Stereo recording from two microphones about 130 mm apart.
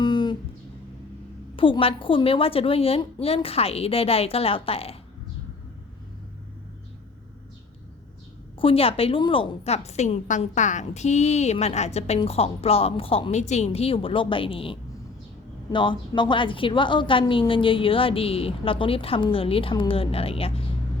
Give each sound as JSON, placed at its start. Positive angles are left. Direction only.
{"t": 0.0, "sound": "a sound", "side_deg": 35}
{"t": 1.5, "sound": "a woman's voice", "side_deg": 40}
{"t": 8.5, "sound": "a woman's voice", "side_deg": 45}